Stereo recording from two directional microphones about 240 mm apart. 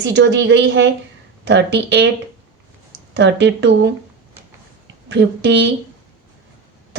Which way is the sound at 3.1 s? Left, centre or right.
Right.